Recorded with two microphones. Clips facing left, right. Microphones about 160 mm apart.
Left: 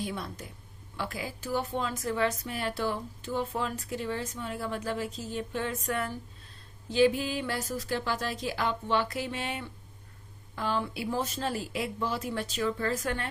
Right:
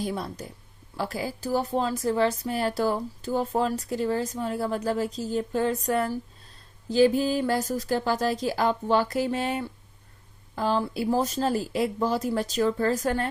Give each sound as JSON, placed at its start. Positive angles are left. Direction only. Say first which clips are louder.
{"t": 0.0, "sound": "a woman's voice", "louder": "right 5 dB", "side_deg": -40}